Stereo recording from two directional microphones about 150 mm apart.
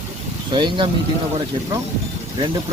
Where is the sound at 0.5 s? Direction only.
30° right (ahead or behind).